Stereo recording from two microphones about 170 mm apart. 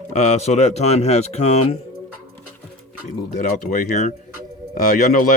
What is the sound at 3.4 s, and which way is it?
Speech, 50° left (ahead or behind).